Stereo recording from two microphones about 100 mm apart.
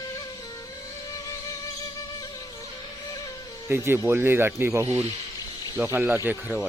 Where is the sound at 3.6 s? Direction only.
25° right (ahead or behind).